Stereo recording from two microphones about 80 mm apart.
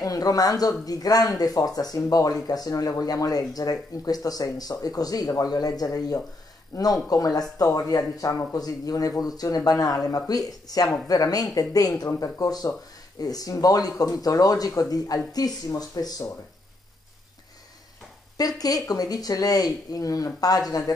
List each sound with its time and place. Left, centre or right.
0.0 s speech: left
18.6 s speech: left